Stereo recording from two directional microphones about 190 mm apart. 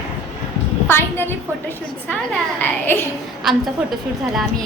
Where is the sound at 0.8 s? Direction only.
10° left (ahead or behind).